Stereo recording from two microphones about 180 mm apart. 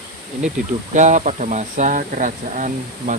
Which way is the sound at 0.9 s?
45° right (ahead or behind).